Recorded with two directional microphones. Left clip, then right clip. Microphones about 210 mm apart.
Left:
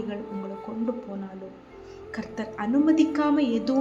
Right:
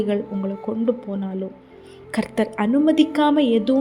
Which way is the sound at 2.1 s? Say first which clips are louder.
Right 11 dB; 40° right (ahead or behind).